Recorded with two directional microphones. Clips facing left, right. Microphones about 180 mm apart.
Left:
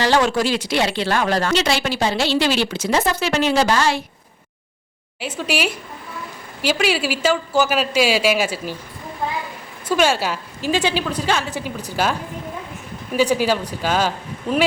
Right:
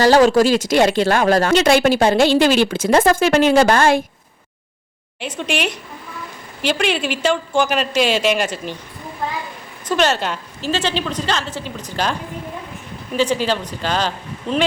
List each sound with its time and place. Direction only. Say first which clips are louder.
0.0 s speech: right 6 dB; 40° right (ahead or behind)
5.2 s a woman's voice: even; 5° left (ahead or behind)
9.9 s speech: even; 10° left (ahead or behind)
13.1 s speech: left 1 dB; 10° left (ahead or behind)